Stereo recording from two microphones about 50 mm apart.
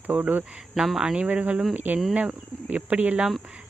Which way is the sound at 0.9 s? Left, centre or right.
Centre.